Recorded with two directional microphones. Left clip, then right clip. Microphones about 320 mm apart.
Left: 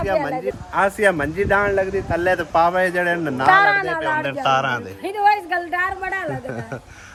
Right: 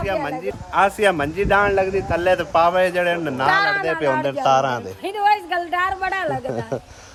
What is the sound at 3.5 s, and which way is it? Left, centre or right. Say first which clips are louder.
Speech: left 5 dB; centre.